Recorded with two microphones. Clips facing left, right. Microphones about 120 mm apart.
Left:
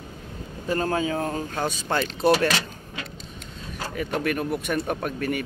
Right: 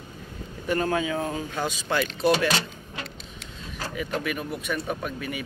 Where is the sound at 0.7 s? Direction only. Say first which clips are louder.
Left 1 dB; 35° left (ahead or behind).